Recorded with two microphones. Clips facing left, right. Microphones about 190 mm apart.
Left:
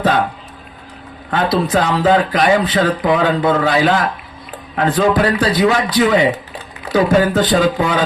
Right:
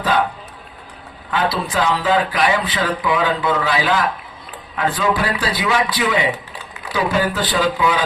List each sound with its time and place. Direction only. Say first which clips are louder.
0.0 s music: left 3 dB; 45° left (ahead or behind)
1.3 s speech: left 5 dB; 45° left (ahead or behind)